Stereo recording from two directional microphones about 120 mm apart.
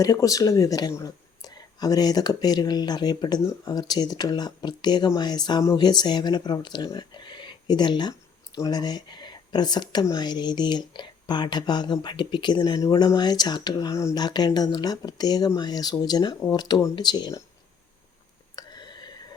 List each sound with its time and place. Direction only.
0.0 s speech: 30° left (ahead or behind)
18.5 s whispering: 35° left (ahead or behind)